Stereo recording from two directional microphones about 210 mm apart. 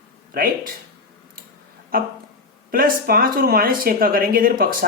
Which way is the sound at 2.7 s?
45° right (ahead or behind).